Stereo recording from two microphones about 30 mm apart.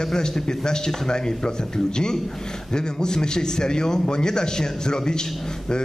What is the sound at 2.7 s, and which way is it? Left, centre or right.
A man's voice, left.